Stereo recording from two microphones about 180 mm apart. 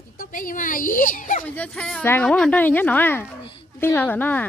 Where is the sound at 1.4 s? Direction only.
5° left (ahead or behind).